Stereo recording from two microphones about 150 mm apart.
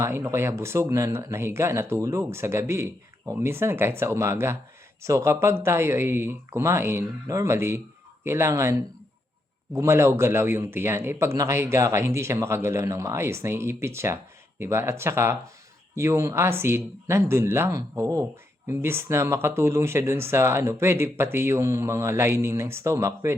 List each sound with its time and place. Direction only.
0.0 s speech: 15° right (ahead or behind)